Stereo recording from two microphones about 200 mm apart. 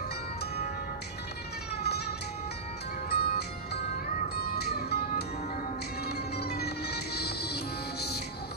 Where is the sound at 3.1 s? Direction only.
50° left (ahead or behind).